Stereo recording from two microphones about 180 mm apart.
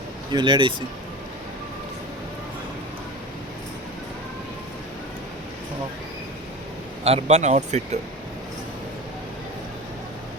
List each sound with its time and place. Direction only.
0.3 s speech: 25° right (ahead or behind)
7.0 s speech: 35° right (ahead or behind)